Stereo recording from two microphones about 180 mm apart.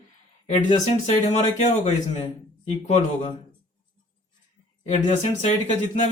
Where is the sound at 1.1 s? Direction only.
35° left (ahead or behind).